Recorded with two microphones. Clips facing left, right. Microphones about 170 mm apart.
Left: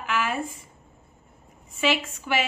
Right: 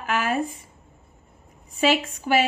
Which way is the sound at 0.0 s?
40° right (ahead or behind).